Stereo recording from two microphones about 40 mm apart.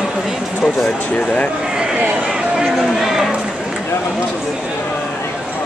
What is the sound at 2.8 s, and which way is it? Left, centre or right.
Speech, centre.